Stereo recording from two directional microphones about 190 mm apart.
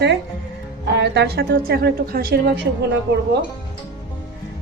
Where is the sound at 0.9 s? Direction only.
65° right (ahead or behind).